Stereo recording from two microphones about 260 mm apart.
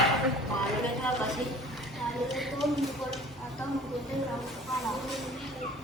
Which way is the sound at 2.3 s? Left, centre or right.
Centre.